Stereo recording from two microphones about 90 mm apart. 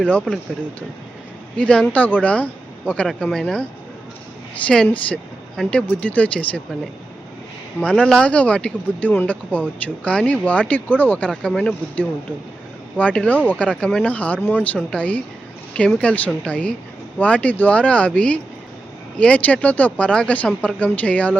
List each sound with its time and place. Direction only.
0.0 s speech: 10° left (ahead or behind)
1.5 s speech: 15° left (ahead or behind)
7.8 s speech: 15° left (ahead or behind)